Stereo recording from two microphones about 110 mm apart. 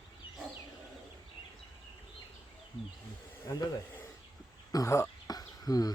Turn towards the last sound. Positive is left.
turn(degrees=35)  # may be behind; listen again after turning